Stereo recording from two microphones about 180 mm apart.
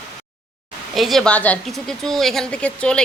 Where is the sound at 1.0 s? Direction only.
Centre (ahead or behind).